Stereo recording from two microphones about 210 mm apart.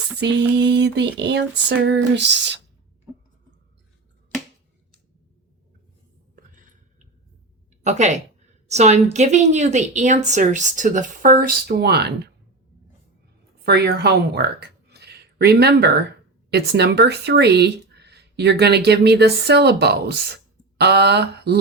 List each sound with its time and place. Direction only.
0.2 s a sound: 55° right (ahead or behind)
7.9 s a woman's voice: 35° right (ahead or behind); by 12.3 s 50° right (ahead or behind)
13.7 s speech: 50° right (ahead or behind)